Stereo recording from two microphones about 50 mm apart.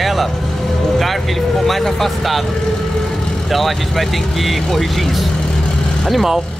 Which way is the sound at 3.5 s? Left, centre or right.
Centre.